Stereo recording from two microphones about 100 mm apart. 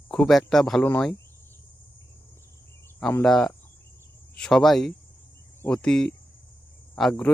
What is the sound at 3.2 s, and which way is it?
Speech, 5° left (ahead or behind).